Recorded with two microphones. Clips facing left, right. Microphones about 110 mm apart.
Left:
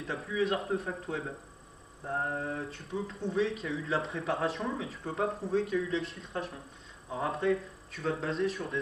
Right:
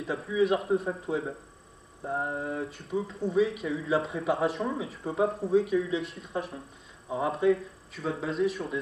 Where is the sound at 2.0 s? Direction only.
5° right (ahead or behind).